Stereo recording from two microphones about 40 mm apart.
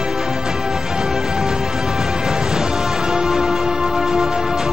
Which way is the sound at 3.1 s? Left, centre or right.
Centre.